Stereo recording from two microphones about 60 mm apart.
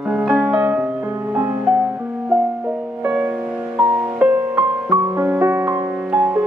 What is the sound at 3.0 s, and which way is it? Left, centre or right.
Music, right.